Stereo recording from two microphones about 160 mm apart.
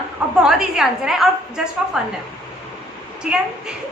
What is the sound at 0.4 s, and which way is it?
A woman's voice, centre (ahead or behind).